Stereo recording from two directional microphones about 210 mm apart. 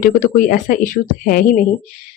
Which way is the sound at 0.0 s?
40° left (ahead or behind).